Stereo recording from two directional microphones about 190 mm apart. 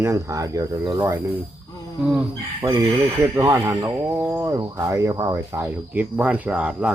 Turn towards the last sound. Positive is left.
turn(degrees=-5)  # may be behind; listen again after turning